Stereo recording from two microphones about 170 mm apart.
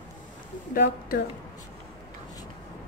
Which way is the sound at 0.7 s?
65° left (ahead or behind).